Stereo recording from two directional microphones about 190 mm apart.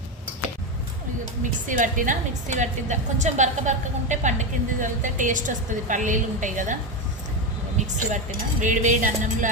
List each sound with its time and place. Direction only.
1.6 s a woman's voice: 45° right (ahead or behind)
7.8 s a woman's voice: 40° right (ahead or behind)